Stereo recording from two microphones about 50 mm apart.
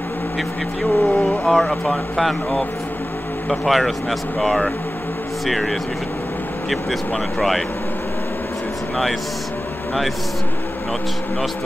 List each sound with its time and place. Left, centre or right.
0.8 s speech: centre